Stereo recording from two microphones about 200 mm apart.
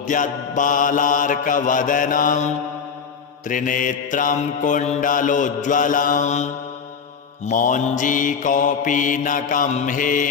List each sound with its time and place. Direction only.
0.0 s mantra: 40° left (ahead or behind)